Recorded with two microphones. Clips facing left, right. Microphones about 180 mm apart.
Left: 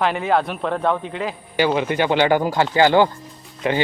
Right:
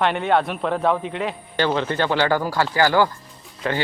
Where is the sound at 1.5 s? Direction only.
10° left (ahead or behind).